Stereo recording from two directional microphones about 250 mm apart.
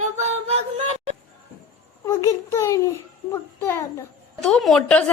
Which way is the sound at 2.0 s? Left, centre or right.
Centre.